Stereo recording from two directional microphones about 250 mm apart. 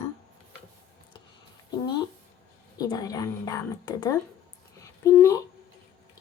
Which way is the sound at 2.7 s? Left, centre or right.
Centre.